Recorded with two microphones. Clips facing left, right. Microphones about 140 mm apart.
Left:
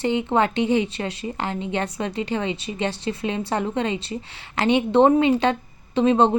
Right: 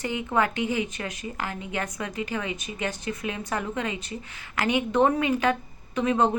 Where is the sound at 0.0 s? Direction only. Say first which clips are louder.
Left 5 dB; 30° left (ahead or behind).